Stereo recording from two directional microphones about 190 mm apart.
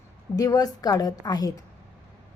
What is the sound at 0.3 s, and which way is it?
A woman's voice, 20° left (ahead or behind).